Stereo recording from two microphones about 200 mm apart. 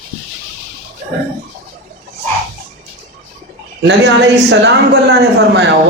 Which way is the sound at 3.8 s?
60° right (ahead or behind).